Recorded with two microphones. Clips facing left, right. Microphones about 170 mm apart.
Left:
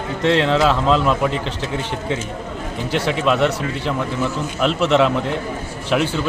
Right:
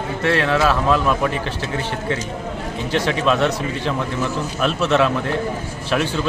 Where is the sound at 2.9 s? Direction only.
10° left (ahead or behind).